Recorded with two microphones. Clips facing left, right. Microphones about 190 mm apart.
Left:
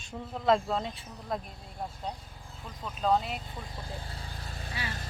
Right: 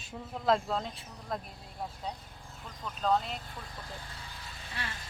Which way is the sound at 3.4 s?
20° left (ahead or behind).